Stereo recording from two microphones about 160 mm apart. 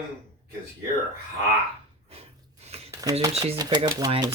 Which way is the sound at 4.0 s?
30° right (ahead or behind).